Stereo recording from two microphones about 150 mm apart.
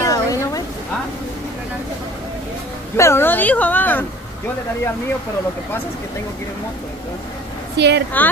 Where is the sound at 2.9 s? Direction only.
20° left (ahead or behind).